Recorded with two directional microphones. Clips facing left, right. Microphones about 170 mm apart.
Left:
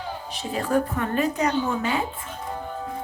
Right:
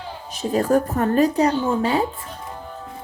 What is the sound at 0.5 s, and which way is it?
A woman's voice, 45° right (ahead or behind).